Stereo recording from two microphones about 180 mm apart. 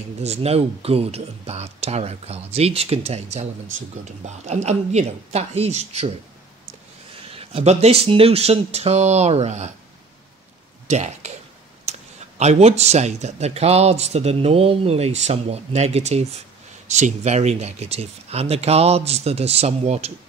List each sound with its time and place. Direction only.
0.2 s speech: 35° right (ahead or behind)
7.2 s speech: 30° right (ahead or behind)
10.9 s speech: 40° right (ahead or behind)
11.9 s a sound: 35° right (ahead or behind)
12.4 s speech: 40° right (ahead or behind)